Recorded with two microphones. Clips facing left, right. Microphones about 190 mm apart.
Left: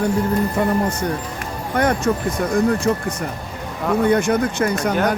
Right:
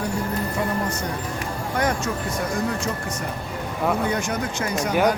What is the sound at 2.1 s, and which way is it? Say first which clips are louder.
Speech: left 8 dB; 50° left (ahead or behind).